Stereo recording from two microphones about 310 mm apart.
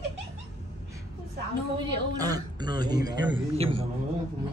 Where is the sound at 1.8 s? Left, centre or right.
Centre.